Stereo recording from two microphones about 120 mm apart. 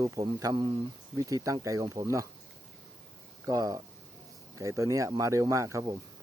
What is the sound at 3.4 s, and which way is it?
Speech, 30° right (ahead or behind).